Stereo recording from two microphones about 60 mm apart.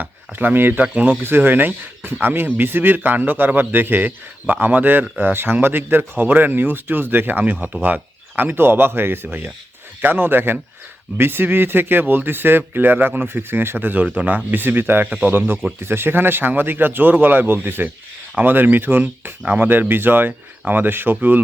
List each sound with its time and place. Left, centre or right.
0.0 s speech: right
0.9 s speech: right
1.2 s speech: right
7.5 s speech: centre
7.8 s speech: right